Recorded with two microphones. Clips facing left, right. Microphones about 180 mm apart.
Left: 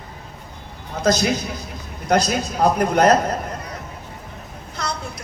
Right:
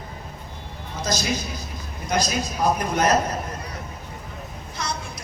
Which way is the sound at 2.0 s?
60° left (ahead or behind).